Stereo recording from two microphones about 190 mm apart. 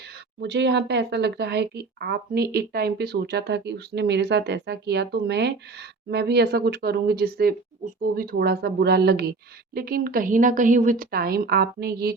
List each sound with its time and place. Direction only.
0.4 s a woman's voice: 65° right (ahead or behind)